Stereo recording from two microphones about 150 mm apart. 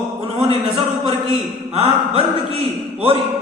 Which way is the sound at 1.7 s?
40° right (ahead or behind).